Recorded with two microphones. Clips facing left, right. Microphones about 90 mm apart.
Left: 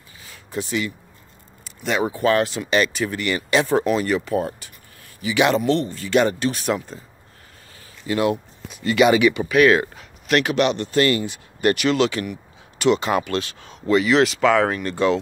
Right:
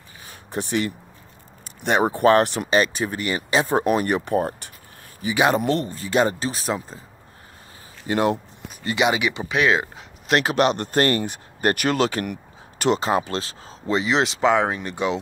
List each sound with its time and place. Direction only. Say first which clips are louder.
0.3 s speech: even; 50° right (ahead or behind)
2.4 s speech: right 1 dB; 60° right (ahead or behind)
2.7 s speech: left 1 dB; 30° right (ahead or behind)
3.8 s speech: even; 45° right (ahead or behind)
5.2 s speech: left 1 dB; 35° right (ahead or behind)
8.1 s speech: even; 40° right (ahead or behind)
8.8 s speech: left 6 dB; 15° right (ahead or behind)
10.2 s speech: even; 30° right (ahead or behind); by 15.1 s 15° right (ahead or behind)